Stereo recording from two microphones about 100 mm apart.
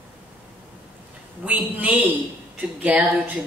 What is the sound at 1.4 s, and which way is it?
A man's voice, 15° right (ahead or behind).